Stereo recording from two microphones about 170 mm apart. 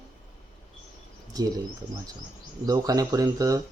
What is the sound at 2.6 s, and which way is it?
Speech, 20° right (ahead or behind).